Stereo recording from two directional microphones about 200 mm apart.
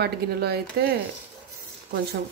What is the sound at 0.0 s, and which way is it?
Speech, 55° right (ahead or behind).